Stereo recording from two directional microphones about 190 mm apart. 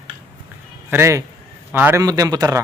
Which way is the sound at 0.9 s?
15° right (ahead or behind).